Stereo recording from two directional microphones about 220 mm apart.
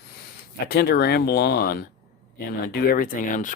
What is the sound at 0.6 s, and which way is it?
Speech, 45° left (ahead or behind).